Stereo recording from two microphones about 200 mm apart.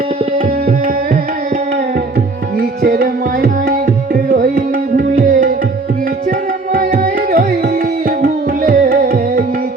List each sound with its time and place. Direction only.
0.4 s tabla: 45° right (ahead or behind)
2.6 s tabla: 45° right (ahead or behind)
6.7 s music: 45° right (ahead or behind)